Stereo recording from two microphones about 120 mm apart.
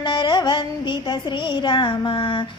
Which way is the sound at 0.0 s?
40° left (ahead or behind).